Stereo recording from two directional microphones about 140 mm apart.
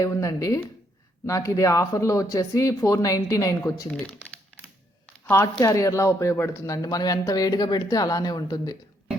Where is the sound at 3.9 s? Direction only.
10° left (ahead or behind).